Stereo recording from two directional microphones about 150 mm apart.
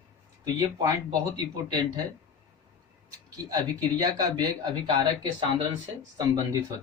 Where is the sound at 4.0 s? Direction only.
25° right (ahead or behind).